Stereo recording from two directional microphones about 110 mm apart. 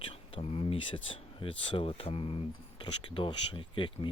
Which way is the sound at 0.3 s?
60° left (ahead or behind).